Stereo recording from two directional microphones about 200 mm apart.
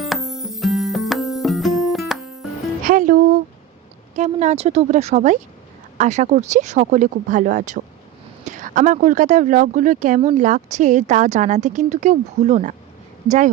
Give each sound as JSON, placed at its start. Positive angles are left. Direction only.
{"t": 0.0, "sound": "music", "side_deg": 0}
{"t": 2.8, "sound": "music", "side_deg": -40}
{"t": 4.1, "sound": "a woman's voice", "side_deg": -35}